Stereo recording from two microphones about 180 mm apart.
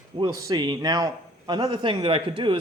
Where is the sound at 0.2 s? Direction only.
20° right (ahead or behind).